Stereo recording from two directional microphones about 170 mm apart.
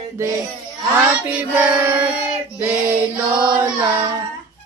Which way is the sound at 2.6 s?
10° right (ahead or behind).